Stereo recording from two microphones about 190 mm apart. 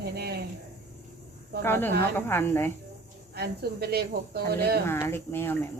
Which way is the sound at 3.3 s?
55° right (ahead or behind).